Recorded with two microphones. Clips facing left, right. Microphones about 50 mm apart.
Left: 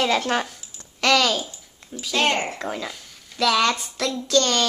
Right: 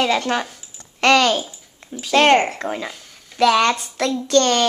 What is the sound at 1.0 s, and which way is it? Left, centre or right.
Speech, right.